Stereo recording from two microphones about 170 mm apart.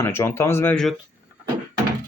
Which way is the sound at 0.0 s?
15° left (ahead or behind).